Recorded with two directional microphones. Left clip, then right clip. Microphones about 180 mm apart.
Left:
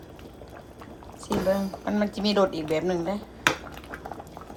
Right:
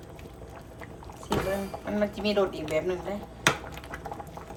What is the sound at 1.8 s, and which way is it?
A woman's voice, 25° left (ahead or behind).